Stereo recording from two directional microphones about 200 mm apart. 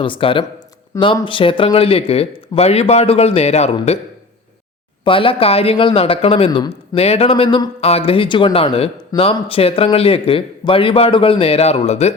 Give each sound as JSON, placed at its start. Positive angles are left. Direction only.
{"t": 0.0, "sound": "speech", "side_deg": 25}
{"t": 5.0, "sound": "speech", "side_deg": 25}